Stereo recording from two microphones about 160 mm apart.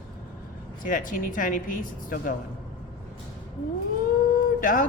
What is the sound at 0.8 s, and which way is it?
A woman's voice, 55° left (ahead or behind).